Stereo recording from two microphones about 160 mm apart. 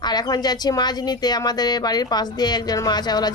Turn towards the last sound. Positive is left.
turn(degrees=25)  # may be behind; listen again after turning